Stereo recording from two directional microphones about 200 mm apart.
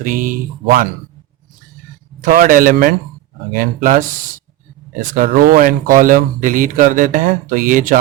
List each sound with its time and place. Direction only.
0.0 s speech: 40° right (ahead or behind)
2.2 s speech: 40° right (ahead or behind)